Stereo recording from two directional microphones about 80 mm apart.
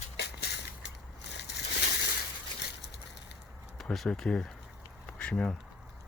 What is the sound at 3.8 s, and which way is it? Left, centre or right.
Speech, centre.